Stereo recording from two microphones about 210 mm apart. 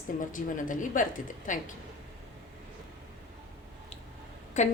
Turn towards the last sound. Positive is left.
turn(degrees=35)  # may be behind; listen again after turning